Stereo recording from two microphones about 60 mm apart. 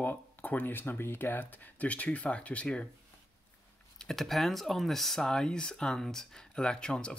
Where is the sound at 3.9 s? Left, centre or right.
Centre.